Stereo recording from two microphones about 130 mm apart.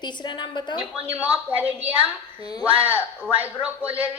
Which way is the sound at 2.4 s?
30° left (ahead or behind).